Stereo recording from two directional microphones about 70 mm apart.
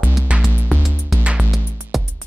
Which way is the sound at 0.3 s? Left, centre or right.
Centre.